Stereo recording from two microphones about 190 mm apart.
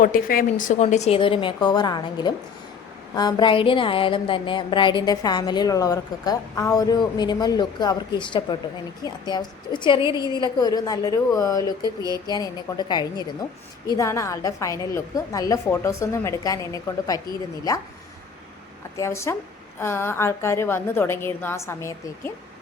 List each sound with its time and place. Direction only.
0.0 s a woman's voice: 50° left (ahead or behind); by 11.6 s 15° left (ahead or behind)
11.8 s mantra: 20° right (ahead or behind)
12.3 s a woman's voice: 20° left (ahead or behind)
18.9 s a woman's voice: 15° left (ahead or behind)